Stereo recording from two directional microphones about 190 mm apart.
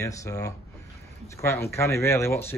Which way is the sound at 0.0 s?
15° left (ahead or behind).